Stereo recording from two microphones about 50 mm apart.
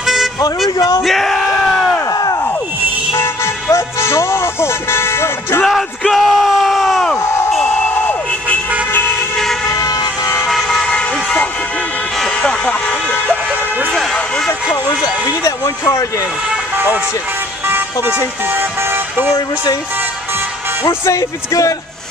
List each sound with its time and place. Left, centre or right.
0.0 s vehicle: centre
1.0 s bellow: centre
3.2 s music: left
5.6 s bellow: centre
7.2 s a sound: left
7.6 s a sound: left
9.7 s vehicle: left
10.4 s vehicle: centre
10.9 s vehicle: centre
12.4 s vehicle: left
16.7 s music: right
17.6 s vehicle: right
21.0 s speech: left